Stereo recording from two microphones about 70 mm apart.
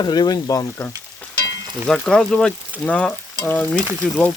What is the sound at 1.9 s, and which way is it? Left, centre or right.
Frying, centre.